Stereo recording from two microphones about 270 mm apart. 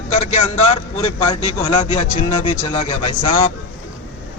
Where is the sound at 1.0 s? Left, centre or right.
Centre.